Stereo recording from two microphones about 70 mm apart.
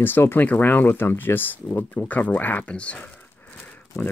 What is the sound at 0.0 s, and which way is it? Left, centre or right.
Speech, left.